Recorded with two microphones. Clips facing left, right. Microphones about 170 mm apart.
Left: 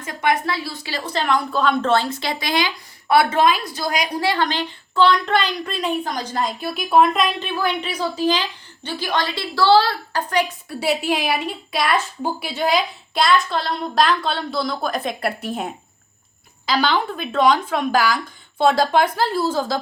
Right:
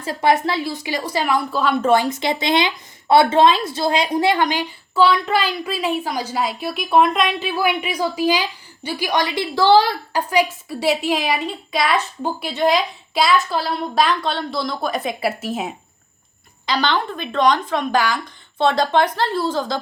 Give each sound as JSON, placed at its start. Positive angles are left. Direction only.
{"t": 0.0, "sound": "a woman's voice", "side_deg": -30}